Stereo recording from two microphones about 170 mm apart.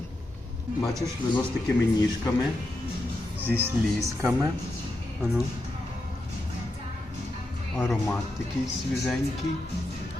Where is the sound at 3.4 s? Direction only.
10° right (ahead or behind).